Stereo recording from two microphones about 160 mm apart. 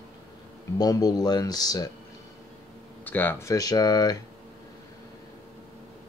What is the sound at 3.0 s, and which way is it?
Speech, 10° left (ahead or behind).